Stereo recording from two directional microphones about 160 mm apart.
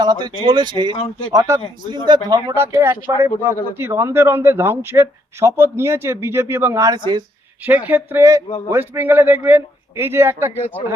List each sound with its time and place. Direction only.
0.0 s a man's voice: 25° right (ahead or behind)
7.6 s a man's voice: 10° right (ahead or behind)